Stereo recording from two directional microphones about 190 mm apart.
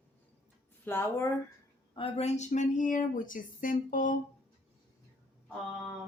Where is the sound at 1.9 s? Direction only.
30° left (ahead or behind); by 4.2 s 45° left (ahead or behind).